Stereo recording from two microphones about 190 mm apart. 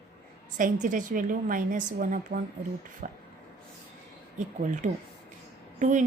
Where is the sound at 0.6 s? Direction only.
40° right (ahead or behind).